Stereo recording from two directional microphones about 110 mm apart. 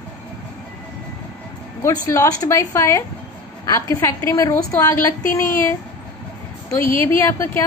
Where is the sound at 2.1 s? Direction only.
30° left (ahead or behind).